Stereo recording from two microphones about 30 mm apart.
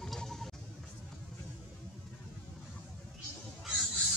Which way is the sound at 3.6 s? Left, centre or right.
Centre.